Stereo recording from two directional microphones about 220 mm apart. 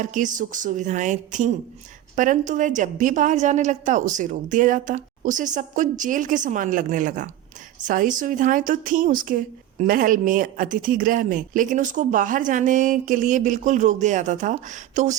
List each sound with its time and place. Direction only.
0.0 s a woman's voice: 35° right (ahead or behind)